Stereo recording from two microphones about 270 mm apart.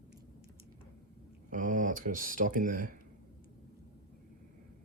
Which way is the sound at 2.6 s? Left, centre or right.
Right.